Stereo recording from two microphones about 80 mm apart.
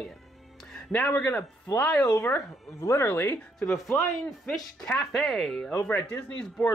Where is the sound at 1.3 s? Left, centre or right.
Left.